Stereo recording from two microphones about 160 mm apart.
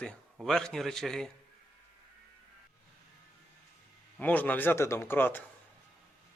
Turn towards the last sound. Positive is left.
turn(degrees=15)  # may be behind; listen again after turning